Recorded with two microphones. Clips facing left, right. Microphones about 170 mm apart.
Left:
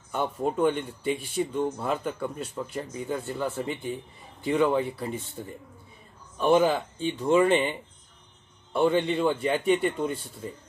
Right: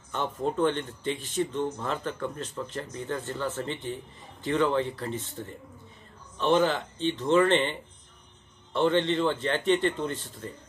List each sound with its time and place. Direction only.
0.1 s speech: 10° left (ahead or behind)
8.7 s speech: 10° left (ahead or behind)